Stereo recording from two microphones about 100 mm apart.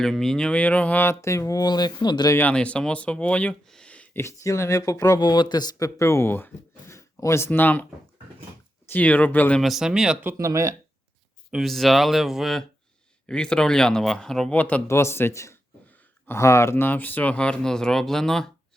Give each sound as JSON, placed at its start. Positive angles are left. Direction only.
{"t": 0.0, "sound": "speech", "side_deg": 5}
{"t": 2.4, "sound": "speech", "side_deg": 10}
{"t": 4.2, "sound": "speech", "side_deg": 30}
{"t": 5.2, "sound": "speech", "side_deg": 45}
{"t": 6.0, "sound": "speech", "side_deg": 30}
{"t": 8.9, "sound": "speech", "side_deg": 15}
{"t": 9.6, "sound": "speech", "side_deg": 0}
{"t": 10.3, "sound": "speech", "side_deg": -30}
{"t": 11.5, "sound": "speech", "side_deg": 0}
{"t": 14.5, "sound": "speech", "side_deg": 15}
{"t": 14.8, "sound": "speech", "side_deg": 25}
{"t": 15.9, "sound": "a sound", "side_deg": 20}
{"t": 16.4, "sound": "speech", "side_deg": 30}